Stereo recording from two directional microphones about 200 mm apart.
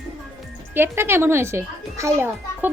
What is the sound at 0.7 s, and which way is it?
A child's voice, 10° right (ahead or behind).